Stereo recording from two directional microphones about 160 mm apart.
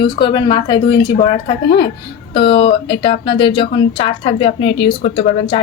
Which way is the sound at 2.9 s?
35° left (ahead or behind).